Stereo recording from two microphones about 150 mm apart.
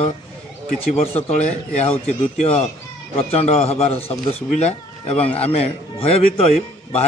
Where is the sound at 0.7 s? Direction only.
45° left (ahead or behind).